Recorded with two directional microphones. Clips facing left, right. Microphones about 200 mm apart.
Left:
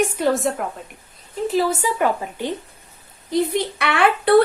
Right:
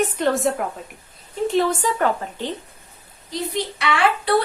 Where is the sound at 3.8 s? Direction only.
55° left (ahead or behind).